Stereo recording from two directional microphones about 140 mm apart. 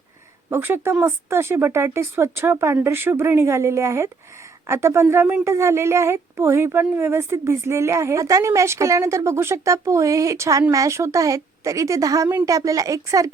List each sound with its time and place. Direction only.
0.5 s speech: 15° right (ahead or behind)